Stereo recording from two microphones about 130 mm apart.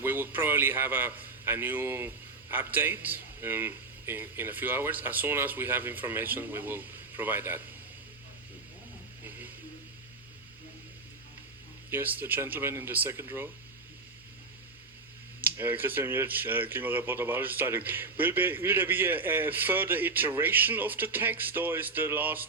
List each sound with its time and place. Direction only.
0.0 s a man's voice: 15° right (ahead or behind)
11.9 s a man's voice: 15° right (ahead or behind)
15.4 s a man's voice: 15° right (ahead or behind)